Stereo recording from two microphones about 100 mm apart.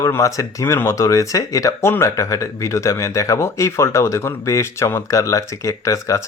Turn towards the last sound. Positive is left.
turn(degrees=30)  # may be behind; listen again after turning